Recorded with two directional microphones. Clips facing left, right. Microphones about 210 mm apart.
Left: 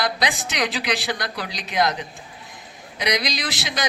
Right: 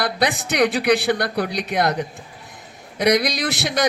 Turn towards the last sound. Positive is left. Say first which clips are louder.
# right 6 dB
turn(degrees=-60)  # may be behind; listen again after turning